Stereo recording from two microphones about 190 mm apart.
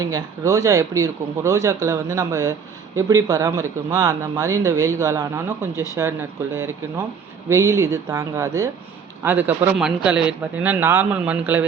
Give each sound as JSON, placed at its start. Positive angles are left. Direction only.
{"t": 0.0, "sound": "speech", "side_deg": -15}